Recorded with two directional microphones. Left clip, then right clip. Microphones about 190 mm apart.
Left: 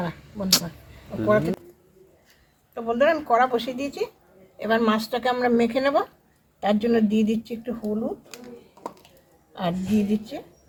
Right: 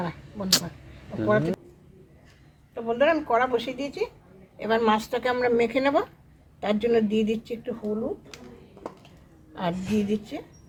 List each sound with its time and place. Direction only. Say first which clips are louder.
0.0 s speech: left 2 dB; centre (ahead or behind)
2.7 s a woman's voice: left 2 dB; centre (ahead or behind)
9.6 s speech: left 2 dB; 15° right (ahead or behind)